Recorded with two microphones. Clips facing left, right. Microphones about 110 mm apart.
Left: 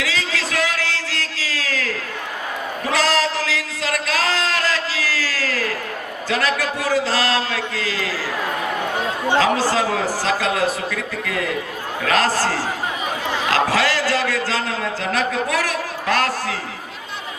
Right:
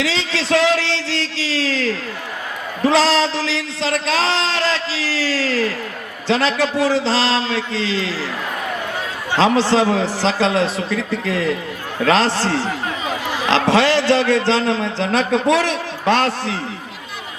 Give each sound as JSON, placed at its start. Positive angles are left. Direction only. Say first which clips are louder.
{"t": 0.0, "sound": "a sound", "louder": "right 3 dB", "side_deg": -30}
{"t": 6.2, "sound": "a man's voice", "louder": "right 4 dB", "side_deg": -25}
{"t": 9.4, "sound": "a man's voice", "louder": "right 6 dB", "side_deg": -25}